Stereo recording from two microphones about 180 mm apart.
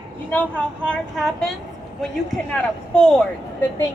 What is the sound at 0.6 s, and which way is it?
Speech, 5° left (ahead or behind).